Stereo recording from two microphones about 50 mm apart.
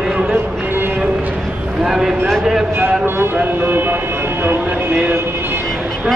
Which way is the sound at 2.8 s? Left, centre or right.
Right.